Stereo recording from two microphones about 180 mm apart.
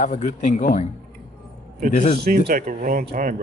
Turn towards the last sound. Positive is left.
turn(degrees=-50)  # may be behind; listen again after turning